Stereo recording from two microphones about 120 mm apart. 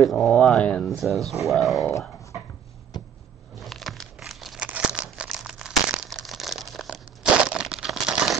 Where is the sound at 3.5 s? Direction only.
Centre (ahead or behind).